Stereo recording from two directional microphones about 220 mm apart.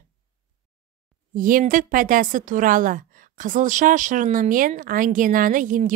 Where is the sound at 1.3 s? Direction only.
40° right (ahead or behind).